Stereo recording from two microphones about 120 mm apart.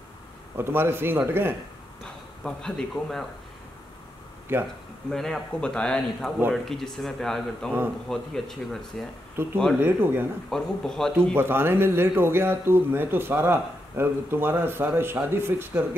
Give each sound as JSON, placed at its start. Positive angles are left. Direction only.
{"t": 0.6, "sound": "a man's voice", "side_deg": -20}
{"t": 2.4, "sound": "a man's voice", "side_deg": 5}
{"t": 4.5, "sound": "speech", "side_deg": -15}
{"t": 5.1, "sound": "a man's voice", "side_deg": 5}
{"t": 9.4, "sound": "speech", "side_deg": -20}
{"t": 10.5, "sound": "a man's voice", "side_deg": 5}
{"t": 11.3, "sound": "a man's voice", "side_deg": -20}